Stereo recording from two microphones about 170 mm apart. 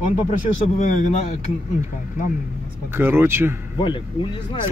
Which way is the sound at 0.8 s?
45° left (ahead or behind).